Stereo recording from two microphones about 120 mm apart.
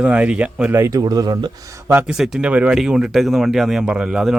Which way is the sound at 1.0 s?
35° right (ahead or behind).